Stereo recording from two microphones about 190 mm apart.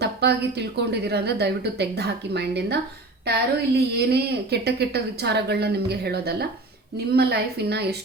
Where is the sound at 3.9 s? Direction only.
55° right (ahead or behind).